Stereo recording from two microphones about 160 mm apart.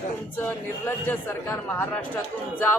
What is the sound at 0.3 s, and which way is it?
A man's voice, 10° left (ahead or behind).